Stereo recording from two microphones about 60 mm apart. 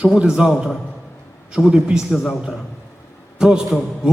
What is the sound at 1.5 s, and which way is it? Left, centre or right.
Speech, centre.